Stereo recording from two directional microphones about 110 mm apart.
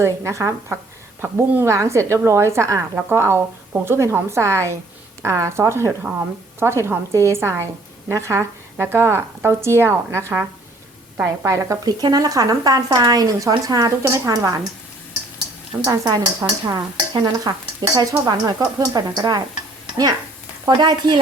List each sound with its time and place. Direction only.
0.0 s a woman's voice: 25° right (ahead or behind)
11.4 s speech: 30° right (ahead or behind)
15.7 s a woman's voice: 15° right (ahead or behind)
16.4 s speech: 35° right (ahead or behind)
20.7 s speech: 40° right (ahead or behind)